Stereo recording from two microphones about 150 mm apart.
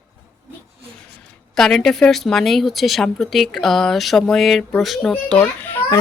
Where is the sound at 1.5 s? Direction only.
5° left (ahead or behind).